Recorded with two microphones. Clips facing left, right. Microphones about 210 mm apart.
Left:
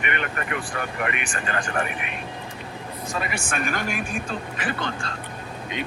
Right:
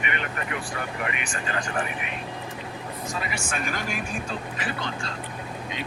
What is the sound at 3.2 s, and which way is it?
Speech, 55° left (ahead or behind).